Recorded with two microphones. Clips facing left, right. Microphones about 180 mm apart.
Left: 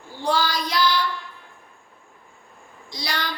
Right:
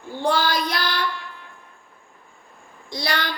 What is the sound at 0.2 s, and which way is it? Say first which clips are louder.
Child singing: right 2 dB; 55° right (ahead or behind).